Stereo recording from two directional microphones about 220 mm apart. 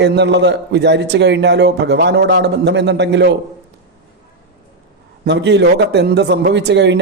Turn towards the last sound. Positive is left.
turn(degrees=-50)  # may be behind; listen again after turning